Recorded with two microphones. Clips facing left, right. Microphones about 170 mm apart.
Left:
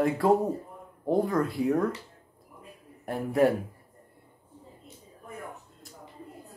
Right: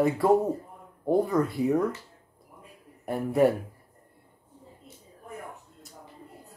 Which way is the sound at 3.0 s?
Centre (ahead or behind).